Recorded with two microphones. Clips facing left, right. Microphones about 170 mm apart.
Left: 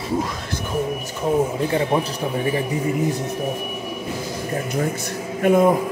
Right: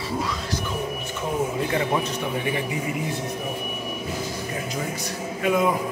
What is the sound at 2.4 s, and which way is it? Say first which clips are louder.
Speech: left 4 dB; 35° left (ahead or behind).